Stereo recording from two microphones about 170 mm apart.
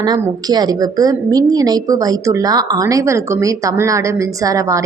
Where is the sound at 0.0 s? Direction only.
25° right (ahead or behind).